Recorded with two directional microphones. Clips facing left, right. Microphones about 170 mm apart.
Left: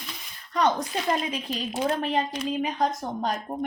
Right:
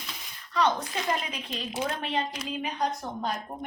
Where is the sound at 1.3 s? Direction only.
35° left (ahead or behind).